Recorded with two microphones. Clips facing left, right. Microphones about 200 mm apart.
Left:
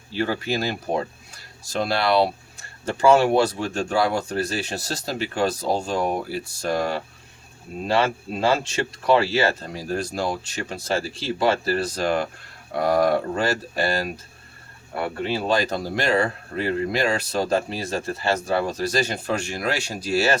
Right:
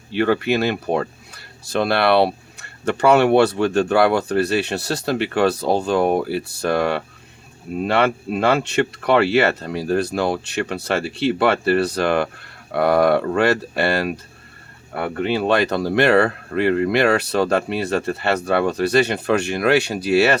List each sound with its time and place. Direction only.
0.1 s speech: 65° right (ahead or behind)